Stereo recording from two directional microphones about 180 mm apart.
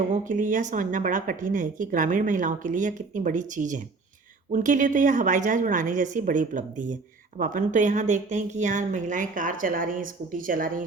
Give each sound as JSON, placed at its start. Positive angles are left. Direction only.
{"t": 0.1, "sound": "speech", "side_deg": -45}